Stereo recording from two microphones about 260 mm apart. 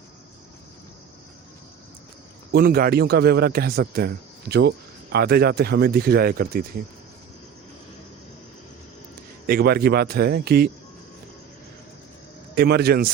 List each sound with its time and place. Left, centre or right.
2.5 s a man's voice: right
9.5 s a man's voice: right
12.5 s a man's voice: right